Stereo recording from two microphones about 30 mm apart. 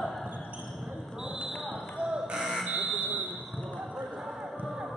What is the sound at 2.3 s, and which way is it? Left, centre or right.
Buzzer, centre.